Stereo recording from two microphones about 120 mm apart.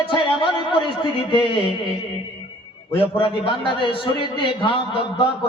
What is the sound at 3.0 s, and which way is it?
A man's voice, 50° left (ahead or behind).